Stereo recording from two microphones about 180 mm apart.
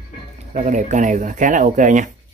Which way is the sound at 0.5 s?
40° right (ahead or behind).